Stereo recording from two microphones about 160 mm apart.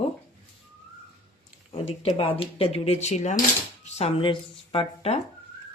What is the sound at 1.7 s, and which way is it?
A man's voice, 35° left (ahead or behind).